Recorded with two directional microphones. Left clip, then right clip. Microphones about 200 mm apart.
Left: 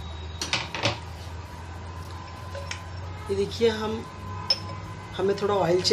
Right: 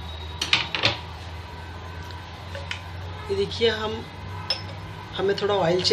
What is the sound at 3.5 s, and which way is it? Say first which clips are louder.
Speech: right 1 dB; 15° left (ahead or behind).